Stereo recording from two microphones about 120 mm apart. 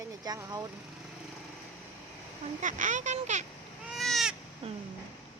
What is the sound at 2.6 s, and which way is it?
Speech, 90° right.